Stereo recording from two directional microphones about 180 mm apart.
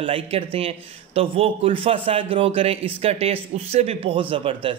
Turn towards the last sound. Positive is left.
turn(degrees=-30)  # may be behind; listen again after turning